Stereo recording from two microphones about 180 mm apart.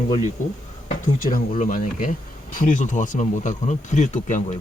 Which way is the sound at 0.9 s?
45° left (ahead or behind).